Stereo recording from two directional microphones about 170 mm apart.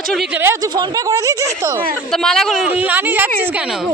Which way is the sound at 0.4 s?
20° right (ahead or behind).